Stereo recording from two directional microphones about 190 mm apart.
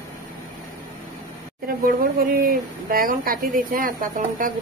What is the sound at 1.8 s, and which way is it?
A woman's voice, 50° right (ahead or behind).